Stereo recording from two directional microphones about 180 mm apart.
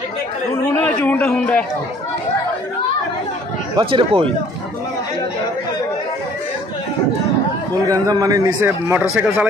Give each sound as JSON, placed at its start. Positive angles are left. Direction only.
{"t": 0.5, "sound": "a man's voice", "side_deg": 10}
{"t": 3.8, "sound": "a man's voice", "side_deg": -30}
{"t": 7.9, "sound": "a man's voice", "side_deg": -20}